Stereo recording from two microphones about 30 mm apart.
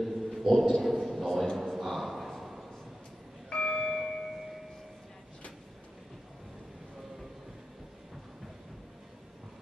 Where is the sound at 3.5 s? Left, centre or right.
Centre.